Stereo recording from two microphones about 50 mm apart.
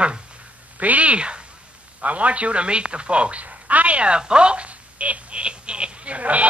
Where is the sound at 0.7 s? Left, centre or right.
Right.